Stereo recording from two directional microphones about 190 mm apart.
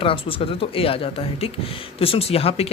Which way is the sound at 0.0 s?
30° left (ahead or behind).